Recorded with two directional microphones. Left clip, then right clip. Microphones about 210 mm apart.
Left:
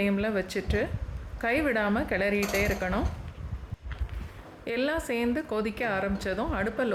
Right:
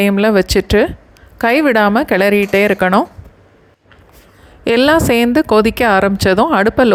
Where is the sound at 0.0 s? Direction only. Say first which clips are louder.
Right 16 dB; 45° right (ahead or behind).